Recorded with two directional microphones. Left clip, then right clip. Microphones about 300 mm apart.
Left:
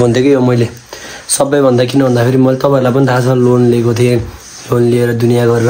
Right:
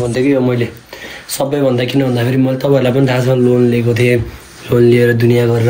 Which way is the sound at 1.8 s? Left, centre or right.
Centre.